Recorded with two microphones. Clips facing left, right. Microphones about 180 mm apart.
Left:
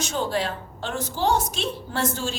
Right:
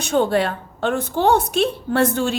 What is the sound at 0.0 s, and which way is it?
A woman's voice, 60° right (ahead or behind).